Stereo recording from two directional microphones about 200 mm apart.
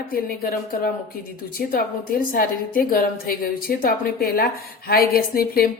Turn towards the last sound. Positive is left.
turn(degrees=45)  # may be behind; listen again after turning